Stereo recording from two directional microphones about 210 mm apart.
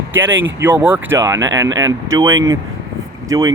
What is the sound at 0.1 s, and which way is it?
Speech, 10° right (ahead or behind).